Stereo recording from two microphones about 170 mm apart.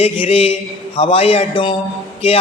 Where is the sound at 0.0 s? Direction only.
35° left (ahead or behind).